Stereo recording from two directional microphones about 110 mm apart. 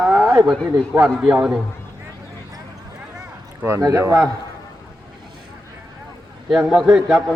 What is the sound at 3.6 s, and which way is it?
Speech, 30° right (ahead or behind).